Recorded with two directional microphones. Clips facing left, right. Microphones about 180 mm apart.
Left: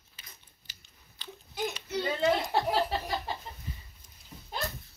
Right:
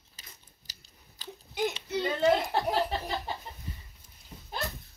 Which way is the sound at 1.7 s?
25° right (ahead or behind).